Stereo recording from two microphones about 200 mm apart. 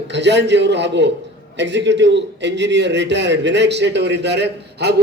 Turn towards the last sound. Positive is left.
turn(degrees=-60)  # may be behind; listen again after turning